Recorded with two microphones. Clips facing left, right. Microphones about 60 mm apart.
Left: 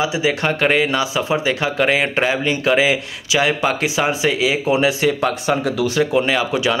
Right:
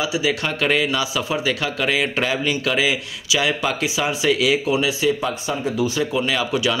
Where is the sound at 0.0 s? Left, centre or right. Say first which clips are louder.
Left 3 dB; left.